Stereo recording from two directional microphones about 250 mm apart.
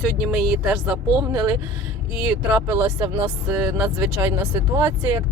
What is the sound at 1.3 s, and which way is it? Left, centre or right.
Speech, centre.